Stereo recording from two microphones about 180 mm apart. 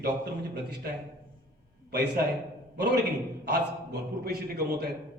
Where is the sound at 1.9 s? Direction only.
65° right (ahead or behind).